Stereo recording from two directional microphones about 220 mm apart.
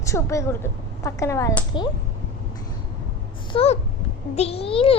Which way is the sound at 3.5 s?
25° left (ahead or behind).